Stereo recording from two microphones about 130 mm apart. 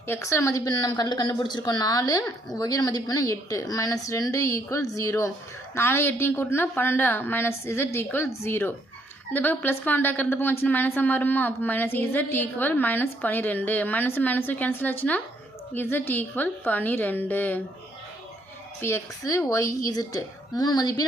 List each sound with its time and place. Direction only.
0.1 s a woman's voice: 20° left (ahead or behind)
18.8 s a woman's voice: 20° left (ahead or behind)